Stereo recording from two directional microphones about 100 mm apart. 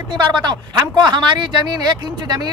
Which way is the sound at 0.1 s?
45° right (ahead or behind).